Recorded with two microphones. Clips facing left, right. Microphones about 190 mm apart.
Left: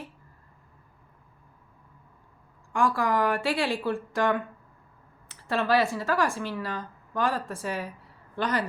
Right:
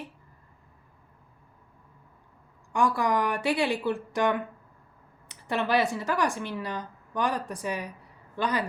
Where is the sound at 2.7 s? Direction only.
20° right (ahead or behind).